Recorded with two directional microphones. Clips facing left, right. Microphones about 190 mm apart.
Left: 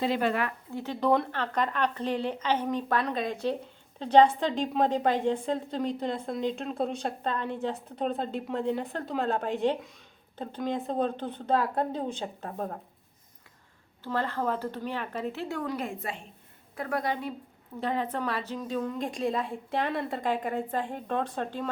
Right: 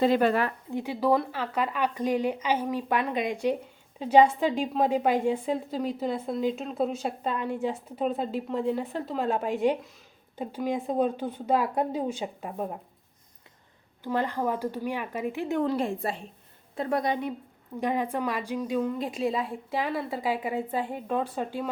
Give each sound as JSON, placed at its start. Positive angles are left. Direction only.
{"t": 0.0, "sound": "speech", "side_deg": -45}
{"t": 0.7, "sound": "a woman's voice", "side_deg": -10}
{"t": 14.0, "sound": "a woman's voice", "side_deg": -15}